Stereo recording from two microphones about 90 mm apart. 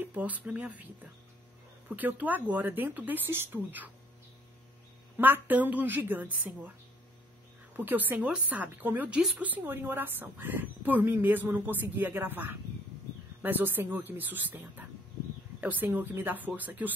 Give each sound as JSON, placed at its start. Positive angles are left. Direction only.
{"t": 0.0, "sound": "a woman's voice", "side_deg": -15}
{"t": 5.1, "sound": "a woman's voice", "side_deg": -20}
{"t": 7.7, "sound": "a woman's voice", "side_deg": -20}